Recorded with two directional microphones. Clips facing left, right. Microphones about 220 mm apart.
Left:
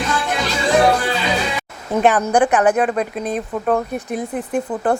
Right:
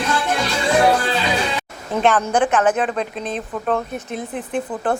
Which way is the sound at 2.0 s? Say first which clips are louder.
Left 2 dB; 10° left (ahead or behind).